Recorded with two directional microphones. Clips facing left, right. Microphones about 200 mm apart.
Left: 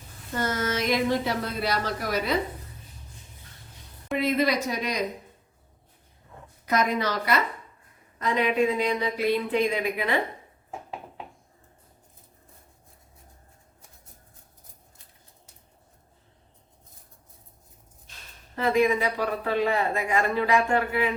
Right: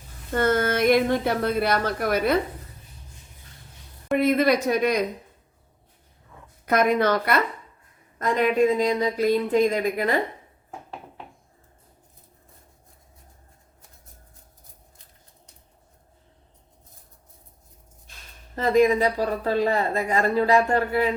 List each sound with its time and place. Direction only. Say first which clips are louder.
0.3 s speech: right 6 dB; 55° right (ahead or behind)
4.2 s speech: right 4 dB; 55° right (ahead or behind)
6.7 s speech: right 5 dB; 55° right (ahead or behind)
8.2 s speech: right 3 dB; 45° right (ahead or behind)
18.5 s speech: right 4 dB; 40° right (ahead or behind)